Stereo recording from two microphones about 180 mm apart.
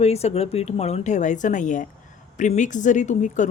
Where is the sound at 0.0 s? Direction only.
35° left (ahead or behind).